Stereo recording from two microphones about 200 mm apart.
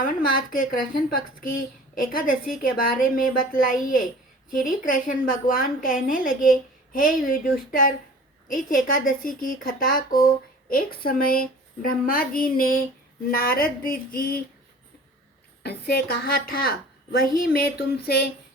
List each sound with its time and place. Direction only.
0.0 s a woman's voice: 45° left (ahead or behind)
15.6 s a woman's voice: 55° left (ahead or behind)